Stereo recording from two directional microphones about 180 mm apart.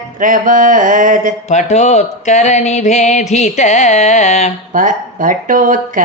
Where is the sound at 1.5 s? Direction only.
40° left (ahead or behind).